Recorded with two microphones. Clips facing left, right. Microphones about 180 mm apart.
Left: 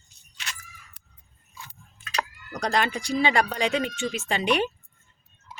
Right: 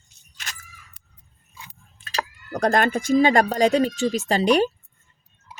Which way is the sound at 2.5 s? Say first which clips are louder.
Right 6 dB; 50° right (ahead or behind).